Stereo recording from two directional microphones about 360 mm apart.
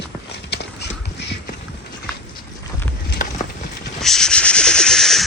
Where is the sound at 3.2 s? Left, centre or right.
Left.